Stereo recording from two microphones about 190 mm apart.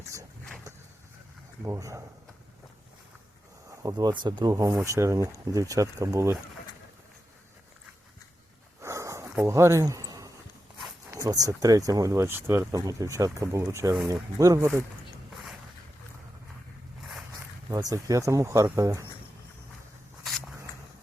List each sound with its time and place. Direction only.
0.0 s dog: 15° right (ahead or behind)
1.6 s speech: 15° right (ahead or behind)
3.7 s speech: 20° right (ahead or behind)
8.8 s snort: 15° right (ahead or behind)
11.1 s speech: 20° right (ahead or behind)
17.7 s speech: 15° right (ahead or behind)